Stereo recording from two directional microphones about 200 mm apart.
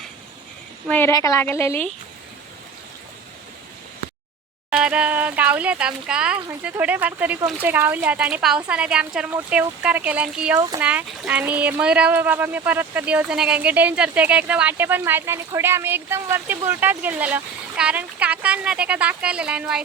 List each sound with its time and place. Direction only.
0.9 s a woman's voice: 10° left (ahead or behind)
4.7 s speech: 5° right (ahead or behind)
10.6 s speech: 20° right (ahead or behind)
10.8 s speech: 10° right (ahead or behind)